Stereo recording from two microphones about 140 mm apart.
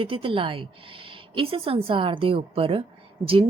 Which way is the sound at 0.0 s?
40° right (ahead or behind).